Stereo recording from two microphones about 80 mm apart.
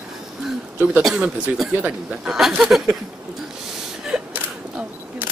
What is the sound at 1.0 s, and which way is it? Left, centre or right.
Speech, centre.